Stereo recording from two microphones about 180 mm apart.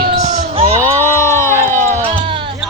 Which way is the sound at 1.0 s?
15° left (ahead or behind).